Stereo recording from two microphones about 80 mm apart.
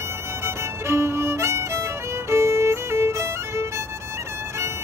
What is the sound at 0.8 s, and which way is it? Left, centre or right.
Violin, right.